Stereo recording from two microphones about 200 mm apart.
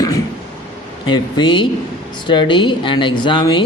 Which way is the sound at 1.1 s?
20° left (ahead or behind).